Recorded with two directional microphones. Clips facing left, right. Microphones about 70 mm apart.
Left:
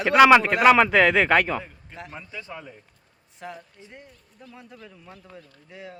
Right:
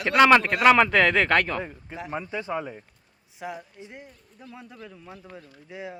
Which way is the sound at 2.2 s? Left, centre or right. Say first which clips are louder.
Right 8 dB; right.